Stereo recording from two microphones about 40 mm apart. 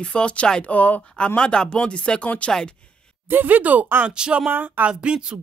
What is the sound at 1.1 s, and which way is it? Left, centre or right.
Speech, left.